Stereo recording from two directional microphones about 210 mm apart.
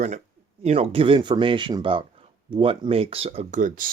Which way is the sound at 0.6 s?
30° right (ahead or behind).